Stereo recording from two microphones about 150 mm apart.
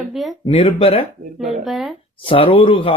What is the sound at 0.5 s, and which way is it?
Speech, 40° left (ahead or behind).